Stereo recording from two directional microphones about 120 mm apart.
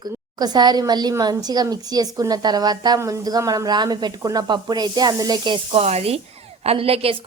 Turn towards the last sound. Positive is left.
turn(degrees=-55)  # may be behind; listen again after turning